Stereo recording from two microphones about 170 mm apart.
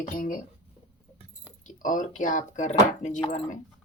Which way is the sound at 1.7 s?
50° left (ahead or behind).